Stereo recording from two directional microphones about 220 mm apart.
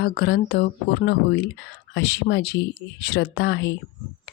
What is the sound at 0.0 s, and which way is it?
Speech, 45° left (ahead or behind).